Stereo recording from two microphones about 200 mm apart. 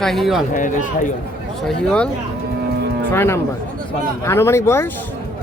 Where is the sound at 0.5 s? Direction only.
40° left (ahead or behind).